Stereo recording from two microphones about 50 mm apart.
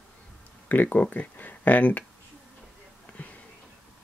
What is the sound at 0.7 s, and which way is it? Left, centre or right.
Speech, left.